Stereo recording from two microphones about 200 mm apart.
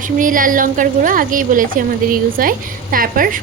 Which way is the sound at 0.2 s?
40° right (ahead or behind).